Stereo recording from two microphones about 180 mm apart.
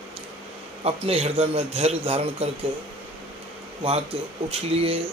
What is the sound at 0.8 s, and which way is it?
Speech, 35° right (ahead or behind).